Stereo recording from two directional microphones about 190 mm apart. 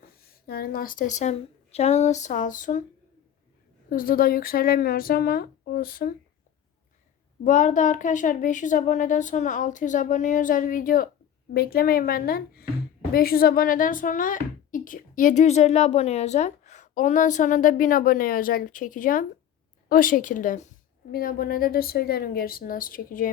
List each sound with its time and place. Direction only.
0.3 s speech: 55° left (ahead or behind)
3.8 s speech: 50° left (ahead or behind)
7.4 s speech: 40° left (ahead or behind)